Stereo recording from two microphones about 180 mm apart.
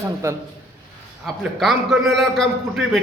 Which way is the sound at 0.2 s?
15° right (ahead or behind).